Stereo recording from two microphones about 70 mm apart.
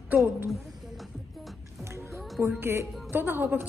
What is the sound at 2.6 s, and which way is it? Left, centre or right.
A woman's voice, right.